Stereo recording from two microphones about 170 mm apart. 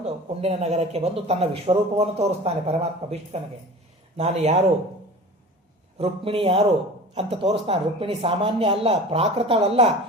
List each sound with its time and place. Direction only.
0.0 s speech: 40° right (ahead or behind)
6.0 s speech: 35° right (ahead or behind)